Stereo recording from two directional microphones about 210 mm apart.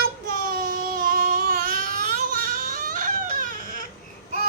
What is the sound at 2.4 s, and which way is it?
Baby cry, 40° right (ahead or behind).